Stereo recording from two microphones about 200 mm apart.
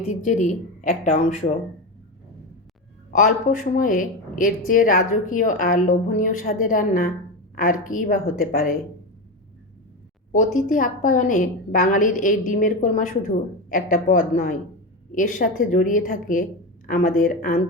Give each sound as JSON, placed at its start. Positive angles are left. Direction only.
{"t": 0.1, "sound": "a woman's voice", "side_deg": 35}
{"t": 3.1, "sound": "a woman's voice", "side_deg": 40}
{"t": 10.3, "sound": "a woman's voice", "side_deg": 40}